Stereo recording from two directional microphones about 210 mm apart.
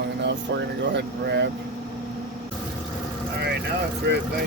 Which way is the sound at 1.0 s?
55° right (ahead or behind).